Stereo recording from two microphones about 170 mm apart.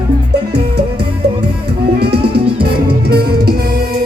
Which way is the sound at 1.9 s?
70° right (ahead or behind).